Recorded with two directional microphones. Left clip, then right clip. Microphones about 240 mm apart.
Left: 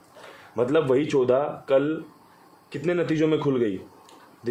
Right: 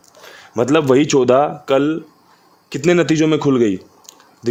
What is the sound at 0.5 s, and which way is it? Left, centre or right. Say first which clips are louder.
Speech: right 8 dB; right.